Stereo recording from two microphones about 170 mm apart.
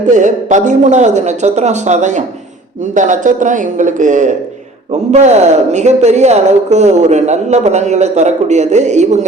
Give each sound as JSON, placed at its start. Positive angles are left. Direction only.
{"t": 0.0, "sound": "speech", "side_deg": -45}